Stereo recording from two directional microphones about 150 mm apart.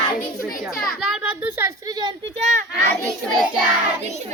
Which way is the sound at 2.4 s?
50° right (ahead or behind).